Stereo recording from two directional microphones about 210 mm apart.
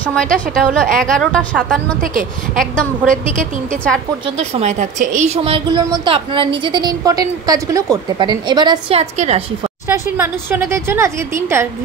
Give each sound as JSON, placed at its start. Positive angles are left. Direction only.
{"t": 0.0, "sound": "a woman's voice", "side_deg": 5}
{"t": 4.4, "sound": "a woman's voice", "side_deg": -30}
{"t": 9.8, "sound": "speech", "side_deg": -10}